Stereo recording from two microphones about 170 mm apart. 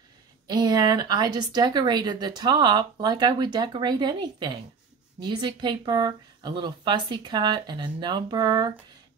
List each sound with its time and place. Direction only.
0.5 s a woman's voice: 25° right (ahead or behind)